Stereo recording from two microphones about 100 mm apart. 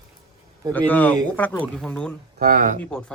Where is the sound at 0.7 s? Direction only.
15° left (ahead or behind).